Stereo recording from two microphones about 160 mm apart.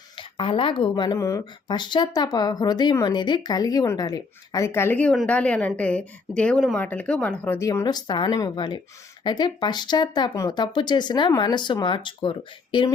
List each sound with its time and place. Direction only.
0.2 s speech: 30° left (ahead or behind)